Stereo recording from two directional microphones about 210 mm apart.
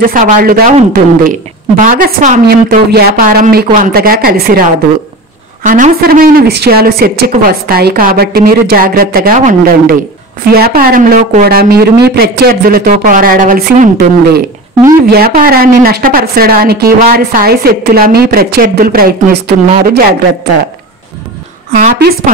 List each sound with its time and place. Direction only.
0.1 s a woman's voice: 40° right (ahead or behind)
21.7 s a woman's voice: 45° right (ahead or behind)